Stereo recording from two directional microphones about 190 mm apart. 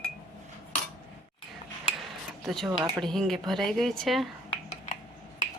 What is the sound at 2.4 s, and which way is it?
A woman's voice, centre (ahead or behind).